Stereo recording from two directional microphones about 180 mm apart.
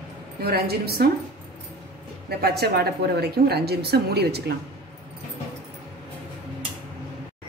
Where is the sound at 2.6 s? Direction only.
65° right (ahead or behind).